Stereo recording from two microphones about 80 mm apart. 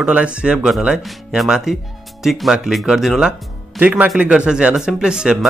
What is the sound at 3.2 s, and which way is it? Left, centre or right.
Music, centre.